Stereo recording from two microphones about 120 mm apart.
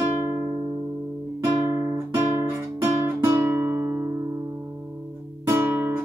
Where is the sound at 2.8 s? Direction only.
20° right (ahead or behind).